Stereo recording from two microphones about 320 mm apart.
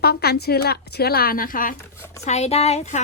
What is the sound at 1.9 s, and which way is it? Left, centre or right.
Speech, centre.